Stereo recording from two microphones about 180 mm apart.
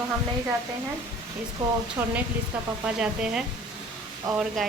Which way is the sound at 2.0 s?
15° right (ahead or behind).